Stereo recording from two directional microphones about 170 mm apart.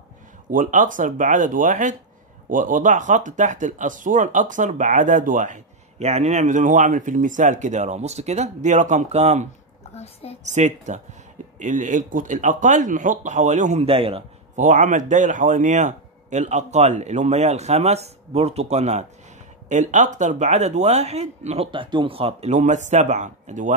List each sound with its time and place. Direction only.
0.5 s speech: 50° right (ahead or behind)